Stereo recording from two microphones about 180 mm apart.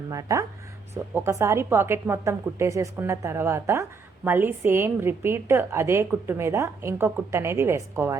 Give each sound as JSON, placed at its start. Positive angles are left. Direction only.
{"t": 0.1, "sound": "a woman's voice", "side_deg": -20}